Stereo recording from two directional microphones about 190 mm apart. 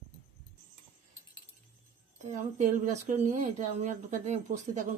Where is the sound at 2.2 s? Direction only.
40° right (ahead or behind).